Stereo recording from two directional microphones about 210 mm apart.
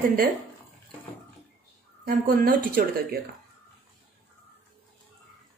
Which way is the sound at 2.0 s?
45° right (ahead or behind).